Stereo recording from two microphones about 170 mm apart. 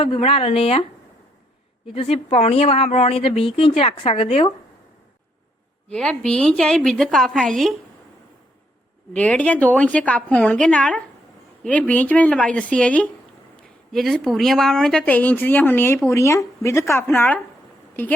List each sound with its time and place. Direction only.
0.0 s speech: 35° left (ahead or behind)
1.9 s speech: 35° left (ahead or behind)
5.9 s a woman's voice: 5° left (ahead or behind)
9.1 s a woman's voice: 10° left (ahead or behind)